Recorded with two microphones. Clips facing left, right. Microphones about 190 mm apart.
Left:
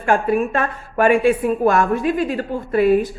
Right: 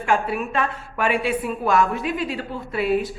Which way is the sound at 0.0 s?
45° left (ahead or behind).